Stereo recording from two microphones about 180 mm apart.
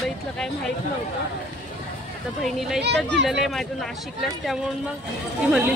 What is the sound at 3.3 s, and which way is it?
Speech, centre (ahead or behind).